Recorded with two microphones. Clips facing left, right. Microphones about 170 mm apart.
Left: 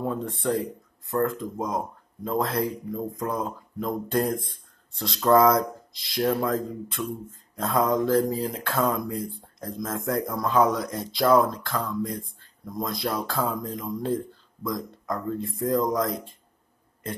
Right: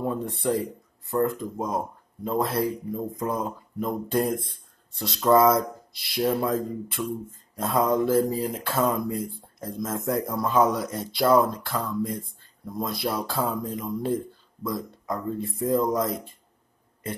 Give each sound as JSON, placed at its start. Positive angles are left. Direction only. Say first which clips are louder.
{"t": 0.0, "sound": "speech", "louder": "right 1 dB", "side_deg": -10}